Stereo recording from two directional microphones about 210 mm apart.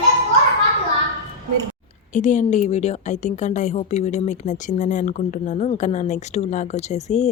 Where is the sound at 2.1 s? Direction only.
35° left (ahead or behind).